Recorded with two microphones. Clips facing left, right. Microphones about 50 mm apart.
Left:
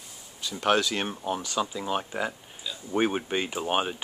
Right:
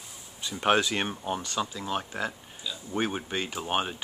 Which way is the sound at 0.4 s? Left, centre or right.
Centre.